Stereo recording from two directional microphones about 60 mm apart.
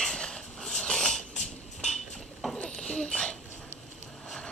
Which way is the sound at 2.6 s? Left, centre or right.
Centre.